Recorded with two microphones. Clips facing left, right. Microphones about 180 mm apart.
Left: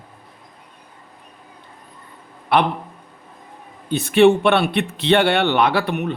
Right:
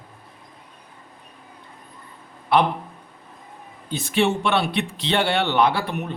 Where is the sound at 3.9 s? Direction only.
60° left (ahead or behind).